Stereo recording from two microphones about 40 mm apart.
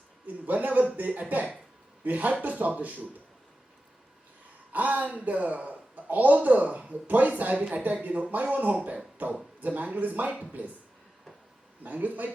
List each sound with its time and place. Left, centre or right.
0.3 s speech: right
4.7 s speech: right
11.8 s speech: right